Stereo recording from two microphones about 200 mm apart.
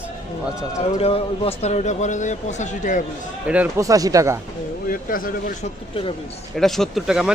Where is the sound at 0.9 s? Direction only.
30° left (ahead or behind).